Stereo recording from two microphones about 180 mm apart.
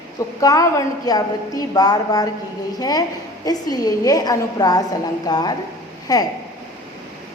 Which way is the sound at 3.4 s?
20° left (ahead or behind).